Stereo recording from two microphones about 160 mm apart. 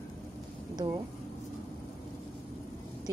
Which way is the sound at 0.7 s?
25° right (ahead or behind).